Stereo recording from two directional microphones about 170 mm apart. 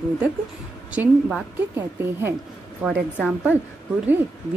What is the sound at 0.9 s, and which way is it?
A woman's voice, 10° right (ahead or behind).